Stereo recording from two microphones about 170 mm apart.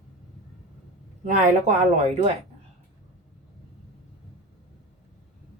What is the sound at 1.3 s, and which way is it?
Speech, 45° right (ahead or behind).